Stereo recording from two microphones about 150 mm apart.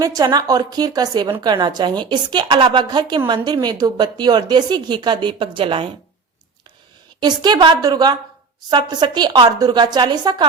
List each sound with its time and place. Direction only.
0.0 s a woman's voice: 25° right (ahead or behind)
7.2 s a woman's voice: 30° right (ahead or behind)